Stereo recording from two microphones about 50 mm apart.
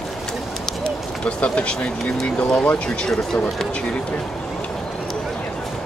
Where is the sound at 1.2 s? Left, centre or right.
Left.